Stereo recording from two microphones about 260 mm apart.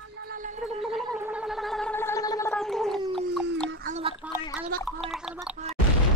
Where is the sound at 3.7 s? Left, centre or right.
Right.